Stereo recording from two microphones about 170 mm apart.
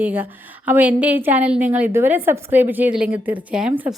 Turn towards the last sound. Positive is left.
turn(degrees=-5)  # may be behind; listen again after turning